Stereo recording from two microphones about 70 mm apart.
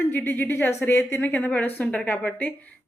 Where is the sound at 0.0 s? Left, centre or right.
Left.